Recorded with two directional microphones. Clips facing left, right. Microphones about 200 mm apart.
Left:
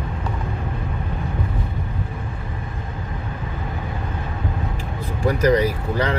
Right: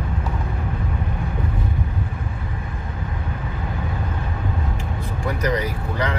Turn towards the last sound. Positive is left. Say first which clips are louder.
# left 4 dB
turn(degrees=30)  # may be behind; listen again after turning